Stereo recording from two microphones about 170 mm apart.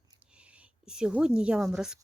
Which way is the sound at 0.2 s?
5° right (ahead or behind).